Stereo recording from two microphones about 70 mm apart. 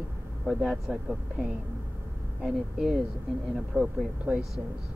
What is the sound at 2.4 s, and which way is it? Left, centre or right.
Speech, centre.